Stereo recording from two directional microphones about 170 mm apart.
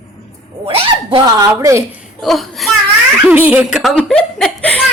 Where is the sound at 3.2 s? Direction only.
10° right (ahead or behind); by 4.8 s 5° left (ahead or behind).